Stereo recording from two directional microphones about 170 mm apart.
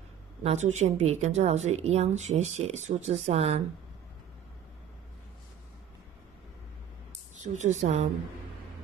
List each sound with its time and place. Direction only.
0.4 s a woman's voice: 40° right (ahead or behind)
7.4 s a woman's voice: 45° right (ahead or behind)